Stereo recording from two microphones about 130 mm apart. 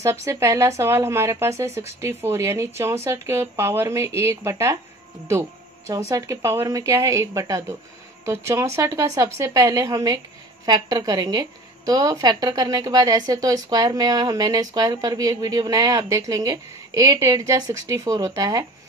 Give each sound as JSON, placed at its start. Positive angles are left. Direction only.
{"t": 0.0, "sound": "speech", "side_deg": -20}
{"t": 5.9, "sound": "speech", "side_deg": -25}